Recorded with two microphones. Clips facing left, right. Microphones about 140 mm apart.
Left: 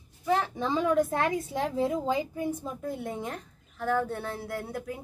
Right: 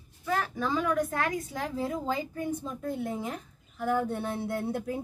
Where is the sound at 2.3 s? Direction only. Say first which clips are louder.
Left 1 dB; 10° left (ahead or behind); by 5.0 s 30° right (ahead or behind).